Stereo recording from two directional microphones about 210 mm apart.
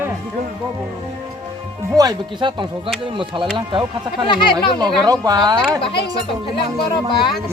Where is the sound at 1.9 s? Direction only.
20° right (ahead or behind).